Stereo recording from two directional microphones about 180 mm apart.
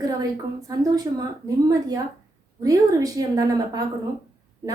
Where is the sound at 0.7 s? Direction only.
20° right (ahead or behind).